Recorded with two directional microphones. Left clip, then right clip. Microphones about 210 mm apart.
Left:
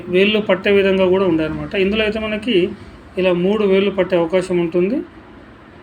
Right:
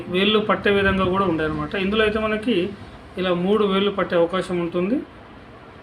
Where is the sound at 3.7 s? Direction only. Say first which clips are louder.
Left 6 dB; 45° right (ahead or behind).